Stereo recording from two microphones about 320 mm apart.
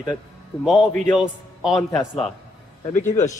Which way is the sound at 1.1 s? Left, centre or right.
Centre.